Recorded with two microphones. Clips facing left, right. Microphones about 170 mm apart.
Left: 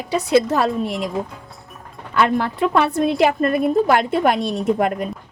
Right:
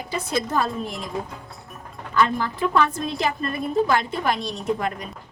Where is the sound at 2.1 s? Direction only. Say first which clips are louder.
Left 4 dB; 70° left (ahead or behind).